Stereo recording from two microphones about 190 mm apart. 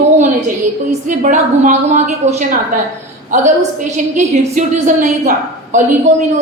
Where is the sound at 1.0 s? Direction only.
40° right (ahead or behind).